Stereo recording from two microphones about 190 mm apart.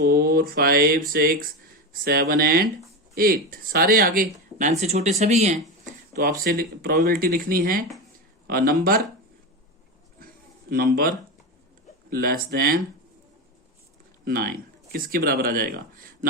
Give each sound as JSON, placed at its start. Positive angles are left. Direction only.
{"t": 0.0, "sound": "speech", "side_deg": -55}
{"t": 6.1, "sound": "speech", "side_deg": -50}
{"t": 10.2, "sound": "a sound", "side_deg": -50}
{"t": 12.1, "sound": "speech", "side_deg": -50}
{"t": 14.3, "sound": "speech", "side_deg": -50}